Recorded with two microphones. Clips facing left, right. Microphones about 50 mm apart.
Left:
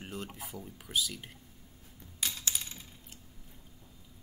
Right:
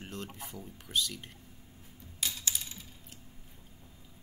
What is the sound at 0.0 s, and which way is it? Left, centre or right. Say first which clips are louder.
Speech: left 1 dB; centre.